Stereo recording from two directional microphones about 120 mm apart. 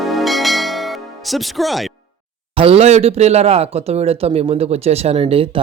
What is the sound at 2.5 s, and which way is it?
Speech, 50° right (ahead or behind).